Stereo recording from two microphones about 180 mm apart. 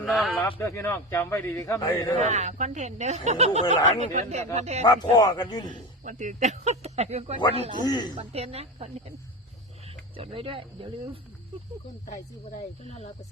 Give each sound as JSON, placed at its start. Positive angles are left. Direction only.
{"t": 0.0, "sound": "speech", "side_deg": 0}
{"t": 0.6, "sound": "a man's voice", "side_deg": 15}
{"t": 2.1, "sound": "speech", "side_deg": -40}
{"t": 4.8, "sound": "a man's voice", "side_deg": 20}
{"t": 6.0, "sound": "speech", "side_deg": -45}
{"t": 7.9, "sound": "a man's voice", "side_deg": 25}
{"t": 8.1, "sound": "speech", "side_deg": -35}